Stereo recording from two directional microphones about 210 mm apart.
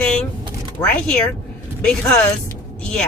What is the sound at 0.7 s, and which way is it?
Speech, 5° left (ahead or behind).